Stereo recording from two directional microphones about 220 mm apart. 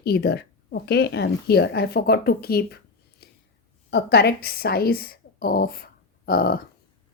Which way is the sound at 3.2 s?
45° left (ahead or behind).